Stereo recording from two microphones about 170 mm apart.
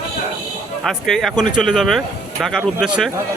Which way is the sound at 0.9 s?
Centre (ahead or behind).